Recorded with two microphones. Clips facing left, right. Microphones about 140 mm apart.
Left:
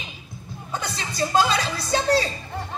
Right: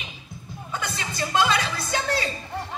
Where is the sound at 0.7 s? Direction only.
35° left (ahead or behind).